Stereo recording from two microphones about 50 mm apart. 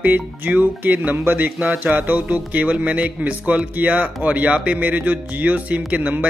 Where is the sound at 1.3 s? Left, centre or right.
Right.